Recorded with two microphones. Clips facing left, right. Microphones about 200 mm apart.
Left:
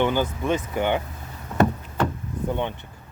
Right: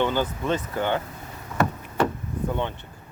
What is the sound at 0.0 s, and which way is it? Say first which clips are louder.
Speech: left 2 dB; 15° left (ahead or behind).